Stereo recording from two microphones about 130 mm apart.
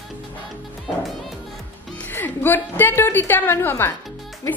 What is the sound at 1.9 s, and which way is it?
Music, 15° left (ahead or behind).